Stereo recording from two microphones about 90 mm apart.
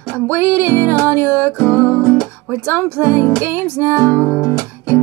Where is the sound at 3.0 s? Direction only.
20° right (ahead or behind).